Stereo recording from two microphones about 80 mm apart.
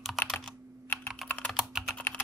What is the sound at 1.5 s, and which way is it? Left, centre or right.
Computer keyboard, centre.